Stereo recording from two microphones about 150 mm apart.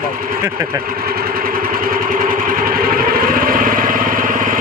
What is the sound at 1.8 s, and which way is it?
Vehicle, 65° right (ahead or behind).